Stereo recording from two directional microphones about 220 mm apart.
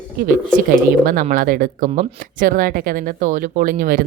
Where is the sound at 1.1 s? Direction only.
40° right (ahead or behind).